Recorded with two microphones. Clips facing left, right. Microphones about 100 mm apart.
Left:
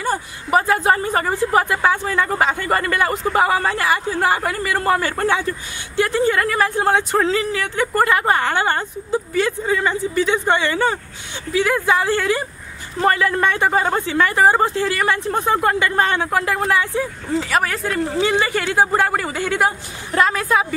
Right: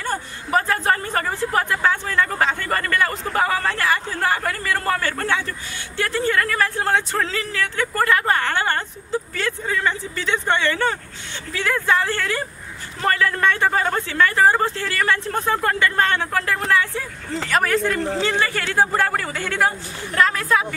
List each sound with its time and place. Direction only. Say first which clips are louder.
0.0 s speech: left 4 dB; 10° left (ahead or behind)
17.3 s speech: right 1 dB; 5° left (ahead or behind)
18.1 s speech: left 3 dB; 15° left (ahead or behind)